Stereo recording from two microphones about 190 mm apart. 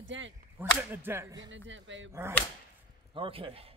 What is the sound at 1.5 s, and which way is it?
Speech, 80° right.